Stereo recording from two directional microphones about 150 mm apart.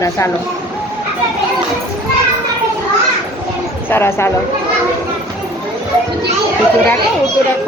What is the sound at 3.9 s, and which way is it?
Speech, 15° left (ahead or behind).